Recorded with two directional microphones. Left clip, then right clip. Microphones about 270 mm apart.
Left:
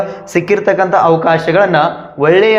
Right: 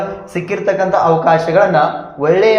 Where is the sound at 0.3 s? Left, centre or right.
Left.